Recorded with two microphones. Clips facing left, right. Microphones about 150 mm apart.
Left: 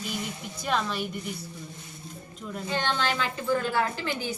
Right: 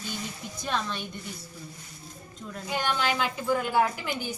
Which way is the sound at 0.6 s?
5° left (ahead or behind).